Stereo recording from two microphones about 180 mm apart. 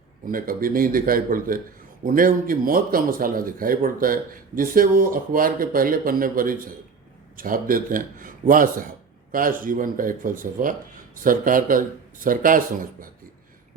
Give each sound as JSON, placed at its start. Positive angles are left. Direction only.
{"t": 0.3, "sound": "speech", "side_deg": -50}